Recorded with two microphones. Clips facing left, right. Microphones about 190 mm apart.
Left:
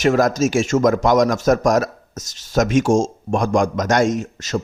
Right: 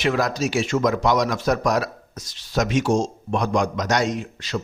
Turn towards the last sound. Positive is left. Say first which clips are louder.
# left 5 dB
turn(degrees=45)  # may be behind; listen again after turning